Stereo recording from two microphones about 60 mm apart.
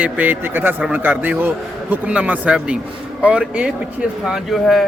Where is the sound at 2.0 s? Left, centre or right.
Right.